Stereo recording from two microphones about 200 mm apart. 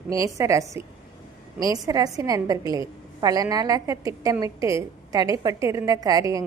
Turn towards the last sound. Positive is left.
turn(degrees=-15)  # may be behind; listen again after turning